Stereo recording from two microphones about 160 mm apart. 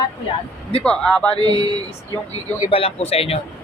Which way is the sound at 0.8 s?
5° left (ahead or behind).